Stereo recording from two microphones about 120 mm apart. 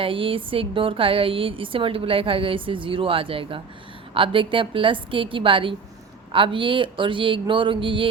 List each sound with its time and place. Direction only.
0.0 s speech: 50° right (ahead or behind)